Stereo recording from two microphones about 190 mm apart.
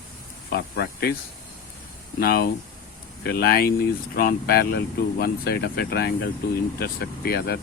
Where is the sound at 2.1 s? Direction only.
55° left (ahead or behind).